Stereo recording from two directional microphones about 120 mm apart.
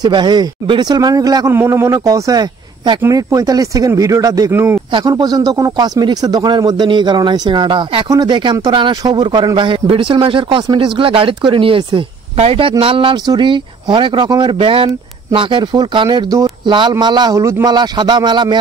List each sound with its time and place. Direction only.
0.0 s speech: 40° right (ahead or behind); by 4.7 s 20° right (ahead or behind)
5.0 s speech: 30° right (ahead or behind)
17.7 s speech: 40° right (ahead or behind)